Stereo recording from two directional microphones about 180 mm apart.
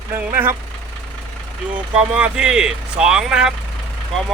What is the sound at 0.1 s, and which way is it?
Speech, 15° right (ahead or behind).